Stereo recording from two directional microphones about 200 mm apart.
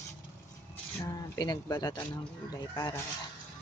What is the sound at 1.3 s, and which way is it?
Speech, 20° left (ahead or behind).